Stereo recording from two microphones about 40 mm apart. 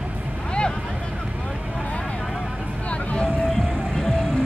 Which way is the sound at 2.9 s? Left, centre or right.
Left.